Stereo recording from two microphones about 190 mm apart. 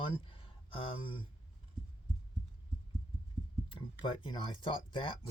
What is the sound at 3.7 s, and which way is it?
Speech, 25° left (ahead or behind).